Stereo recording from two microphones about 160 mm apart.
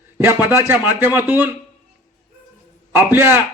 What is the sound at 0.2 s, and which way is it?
A man's voice, 15° right (ahead or behind).